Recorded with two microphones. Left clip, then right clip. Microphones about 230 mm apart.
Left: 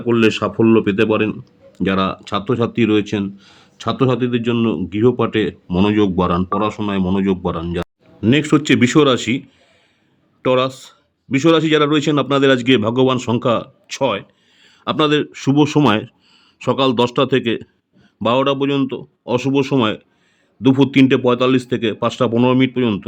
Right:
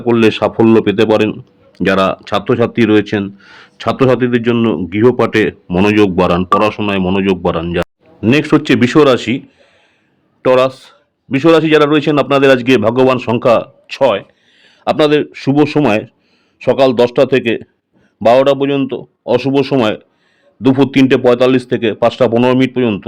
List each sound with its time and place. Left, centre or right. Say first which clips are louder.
0.0 s a man's voice: right 5 dB; centre
10.4 s a man's voice: right 6 dB; centre